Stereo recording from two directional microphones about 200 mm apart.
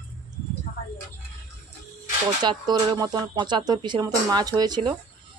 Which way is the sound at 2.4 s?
20° right (ahead or behind).